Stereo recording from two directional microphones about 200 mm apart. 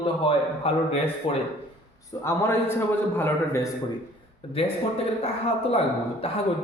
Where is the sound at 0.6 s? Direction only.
30° left (ahead or behind).